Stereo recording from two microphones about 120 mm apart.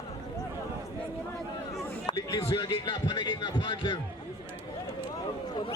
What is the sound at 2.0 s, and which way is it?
Speech, 35° left (ahead or behind).